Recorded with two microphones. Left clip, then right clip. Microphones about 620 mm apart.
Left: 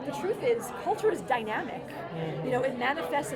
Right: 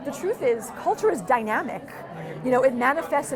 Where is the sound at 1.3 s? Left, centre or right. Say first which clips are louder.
Right 7 dB; right.